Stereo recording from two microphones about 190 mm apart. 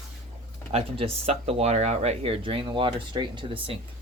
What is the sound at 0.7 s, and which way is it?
Speech, 30° right (ahead or behind).